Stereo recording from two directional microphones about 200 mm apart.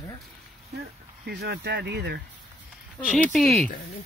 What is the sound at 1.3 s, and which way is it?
Speech, 55° right (ahead or behind).